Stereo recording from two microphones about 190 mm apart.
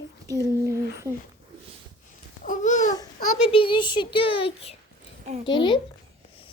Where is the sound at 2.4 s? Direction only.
40° left (ahead or behind).